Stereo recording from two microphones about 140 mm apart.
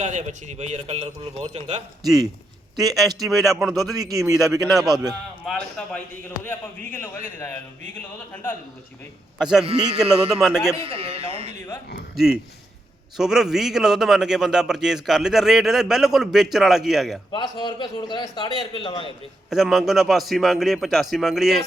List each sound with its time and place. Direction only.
0.0 s a man's voice: 55° right (ahead or behind)
2.8 s a man's voice: centre (ahead or behind)
3.9 s speech: 25° right (ahead or behind)
4.6 s a man's voice: centre (ahead or behind); by 8.5 s 15° left (ahead or behind)
9.4 s a man's voice: 5° right (ahead or behind)
10.8 s a man's voice: 45° right (ahead or behind)
12.1 s a man's voice: 5° right (ahead or behind)
17.3 s a man's voice: 30° left (ahead or behind)
19.5 s a man's voice: 5° right (ahead or behind)